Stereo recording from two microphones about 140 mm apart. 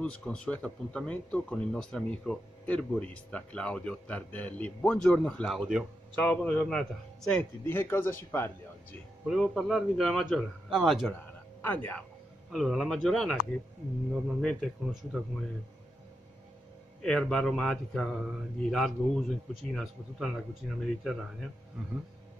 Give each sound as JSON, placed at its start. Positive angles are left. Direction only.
{"t": 0.0, "sound": "speech", "side_deg": 5}
{"t": 9.3, "sound": "speech", "side_deg": 0}
{"t": 11.1, "sound": "music", "side_deg": 10}
{"t": 12.4, "sound": "speech", "side_deg": 0}
{"t": 17.0, "sound": "speech", "side_deg": 5}